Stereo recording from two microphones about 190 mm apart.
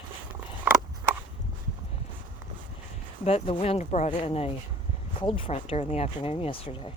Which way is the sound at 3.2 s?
30° left (ahead or behind).